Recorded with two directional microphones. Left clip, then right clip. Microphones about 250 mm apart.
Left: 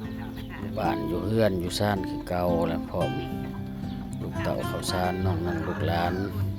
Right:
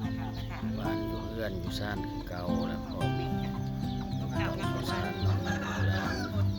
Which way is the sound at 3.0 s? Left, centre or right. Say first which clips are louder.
Left 5 dB; centre.